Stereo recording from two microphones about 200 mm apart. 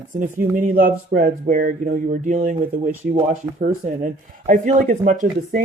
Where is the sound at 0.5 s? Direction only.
45° right (ahead or behind).